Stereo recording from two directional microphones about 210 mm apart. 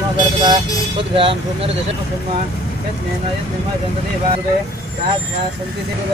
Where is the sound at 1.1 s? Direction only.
25° right (ahead or behind).